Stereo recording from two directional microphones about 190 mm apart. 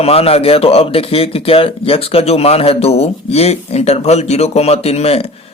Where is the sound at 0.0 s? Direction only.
30° left (ahead or behind).